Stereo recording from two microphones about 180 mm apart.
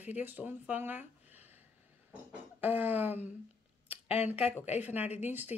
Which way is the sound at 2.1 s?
10° right (ahead or behind).